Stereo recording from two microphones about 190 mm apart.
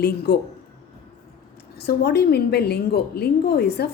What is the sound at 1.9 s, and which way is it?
A woman's voice, 55° left (ahead or behind).